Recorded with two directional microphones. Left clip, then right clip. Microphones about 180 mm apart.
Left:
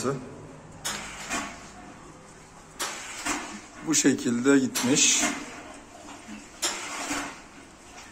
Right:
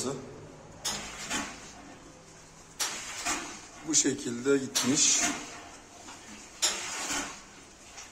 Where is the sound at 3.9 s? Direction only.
20° left (ahead or behind).